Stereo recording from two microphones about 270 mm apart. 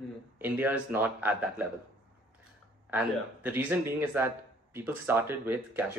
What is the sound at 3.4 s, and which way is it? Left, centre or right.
Speech, centre.